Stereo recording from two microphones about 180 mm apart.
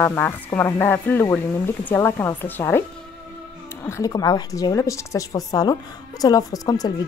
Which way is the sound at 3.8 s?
20° left (ahead or behind).